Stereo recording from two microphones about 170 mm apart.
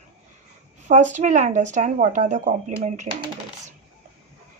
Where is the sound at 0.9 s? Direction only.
45° right (ahead or behind).